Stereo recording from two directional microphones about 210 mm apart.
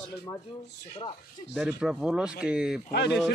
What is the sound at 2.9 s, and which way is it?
Speech, 50° left (ahead or behind).